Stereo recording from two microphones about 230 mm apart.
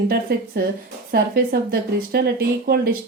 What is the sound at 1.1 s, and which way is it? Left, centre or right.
Speech, right.